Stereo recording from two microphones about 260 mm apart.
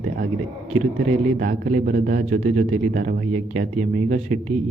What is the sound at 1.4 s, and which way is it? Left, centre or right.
A man's voice, right.